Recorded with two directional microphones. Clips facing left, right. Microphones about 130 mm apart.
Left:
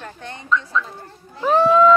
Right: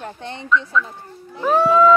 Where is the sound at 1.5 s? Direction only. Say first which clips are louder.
Even; 5° right (ahead or behind).